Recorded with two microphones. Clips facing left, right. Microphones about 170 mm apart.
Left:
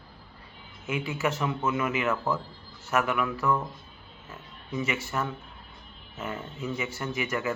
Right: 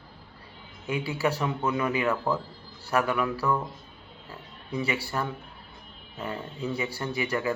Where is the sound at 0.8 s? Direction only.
35° right (ahead or behind).